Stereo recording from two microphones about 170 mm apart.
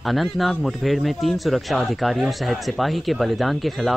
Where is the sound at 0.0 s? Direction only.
Centre (ahead or behind).